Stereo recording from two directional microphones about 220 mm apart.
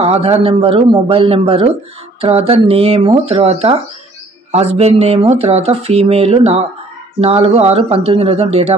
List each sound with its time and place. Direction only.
0.0 s speech: 30° right (ahead or behind)